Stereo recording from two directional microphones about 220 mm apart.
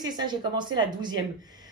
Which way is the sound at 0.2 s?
20° right (ahead or behind).